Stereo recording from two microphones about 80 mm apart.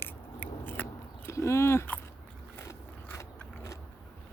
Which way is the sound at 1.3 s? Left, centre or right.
Left.